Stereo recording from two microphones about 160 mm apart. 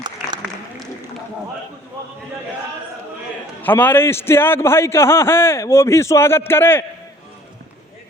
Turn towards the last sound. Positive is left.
turn(degrees=15)  # may be behind; listen again after turning